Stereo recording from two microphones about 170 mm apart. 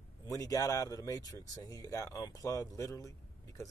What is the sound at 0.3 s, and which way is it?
Speech, 20° left (ahead or behind).